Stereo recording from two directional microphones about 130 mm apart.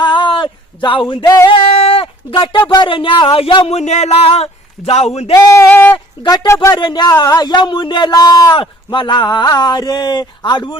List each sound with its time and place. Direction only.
0.0 s a sound: 40° left (ahead or behind)
1.5 s speech: 45° left (ahead or behind)
3.7 s a sound: 60° left (ahead or behind)
5.5 s sheep: 15° left (ahead or behind)
6.2 s speech: 30° left (ahead or behind)
6.7 s speech: 35° left (ahead or behind)